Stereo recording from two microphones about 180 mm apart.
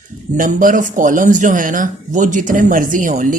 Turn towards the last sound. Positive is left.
turn(degrees=-45)  # may be behind; listen again after turning